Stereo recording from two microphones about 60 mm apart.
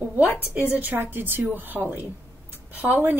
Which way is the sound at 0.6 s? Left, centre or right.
Right.